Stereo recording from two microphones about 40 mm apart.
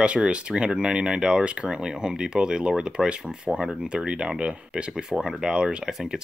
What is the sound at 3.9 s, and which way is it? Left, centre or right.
Speech, right.